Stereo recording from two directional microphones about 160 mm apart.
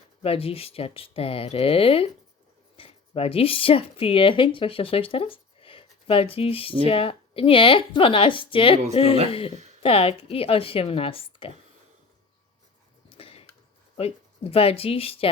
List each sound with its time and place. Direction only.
0.2 s a woman's voice: 35° left (ahead or behind)
9.8 s a woman's voice: 35° left (ahead or behind)
13.1 s a sound: 35° left (ahead or behind)
13.9 s speech: 40° left (ahead or behind)